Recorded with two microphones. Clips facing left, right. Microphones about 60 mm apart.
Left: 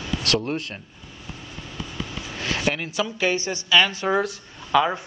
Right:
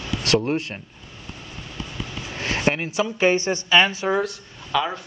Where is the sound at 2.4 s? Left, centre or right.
Right.